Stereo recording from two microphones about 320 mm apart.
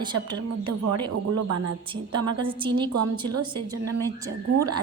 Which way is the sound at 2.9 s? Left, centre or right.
Right.